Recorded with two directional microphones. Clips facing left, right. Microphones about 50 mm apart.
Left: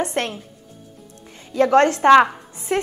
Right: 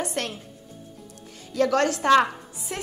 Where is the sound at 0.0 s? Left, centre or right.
Left.